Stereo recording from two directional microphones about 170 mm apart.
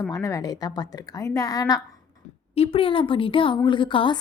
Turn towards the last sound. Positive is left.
turn(degrees=30)  # may be behind; listen again after turning